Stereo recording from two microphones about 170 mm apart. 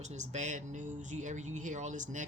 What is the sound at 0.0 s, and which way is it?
Speech, 45° right (ahead or behind).